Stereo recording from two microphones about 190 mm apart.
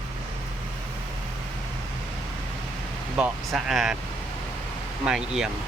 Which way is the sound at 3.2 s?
Centre (ahead or behind).